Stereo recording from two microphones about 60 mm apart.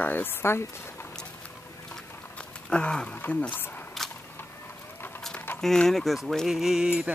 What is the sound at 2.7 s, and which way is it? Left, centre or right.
Speech, centre.